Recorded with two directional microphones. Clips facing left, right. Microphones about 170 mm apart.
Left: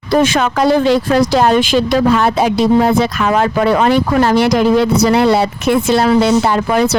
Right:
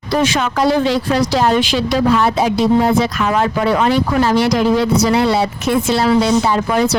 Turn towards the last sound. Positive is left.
turn(degrees=65)  # may be behind; listen again after turning